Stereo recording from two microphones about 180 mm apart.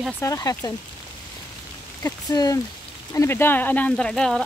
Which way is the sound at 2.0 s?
20° left (ahead or behind).